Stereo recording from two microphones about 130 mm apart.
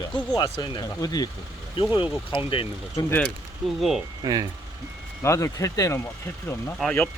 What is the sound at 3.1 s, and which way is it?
Speech, 10° left (ahead or behind).